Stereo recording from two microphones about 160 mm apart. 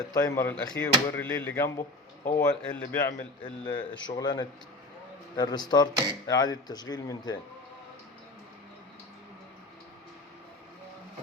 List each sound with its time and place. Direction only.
0.1 s speech: 25° left (ahead or behind)
0.4 s speech: 10° left (ahead or behind)
3.1 s speech: 30° left (ahead or behind)